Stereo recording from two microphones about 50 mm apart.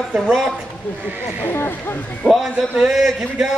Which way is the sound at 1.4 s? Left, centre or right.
Left.